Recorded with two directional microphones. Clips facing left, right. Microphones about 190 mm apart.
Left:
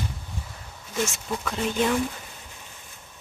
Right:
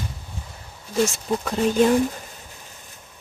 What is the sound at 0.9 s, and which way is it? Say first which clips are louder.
Speech: right 7 dB; 35° right (ahead or behind).